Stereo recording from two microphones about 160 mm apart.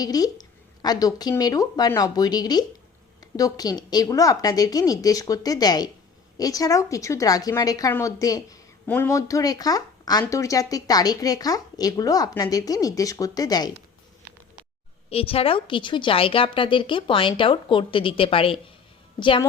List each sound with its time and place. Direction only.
0.0 s speech: 25° left (ahead or behind)
15.1 s a woman's voice: 35° left (ahead or behind)